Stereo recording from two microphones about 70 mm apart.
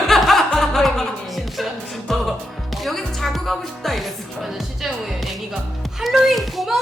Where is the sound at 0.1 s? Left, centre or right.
Centre.